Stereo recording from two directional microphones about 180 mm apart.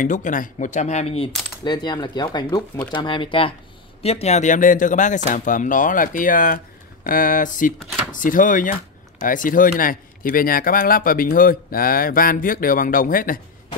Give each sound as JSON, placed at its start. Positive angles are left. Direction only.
{"t": 0.0, "sound": "speech", "side_deg": 45}
{"t": 1.6, "sound": "speech", "side_deg": 25}